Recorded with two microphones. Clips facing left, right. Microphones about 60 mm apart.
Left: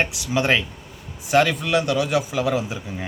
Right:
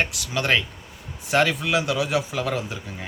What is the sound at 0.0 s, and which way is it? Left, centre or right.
Speech, centre.